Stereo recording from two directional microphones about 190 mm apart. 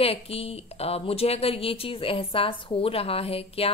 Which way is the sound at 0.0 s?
30° left (ahead or behind).